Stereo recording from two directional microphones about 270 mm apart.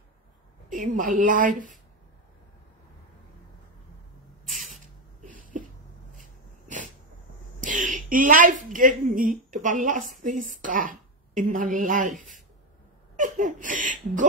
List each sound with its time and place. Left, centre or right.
0.7 s a woman's voice: right
4.6 s a sound: right
7.6 s a woman's voice: right